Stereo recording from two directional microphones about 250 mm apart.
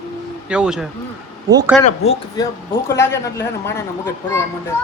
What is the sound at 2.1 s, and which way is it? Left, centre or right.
Speech, left.